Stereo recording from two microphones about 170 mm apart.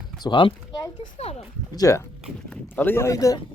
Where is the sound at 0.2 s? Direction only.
30° left (ahead or behind).